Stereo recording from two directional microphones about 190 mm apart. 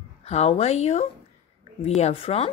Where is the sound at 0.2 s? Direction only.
35° left (ahead or behind).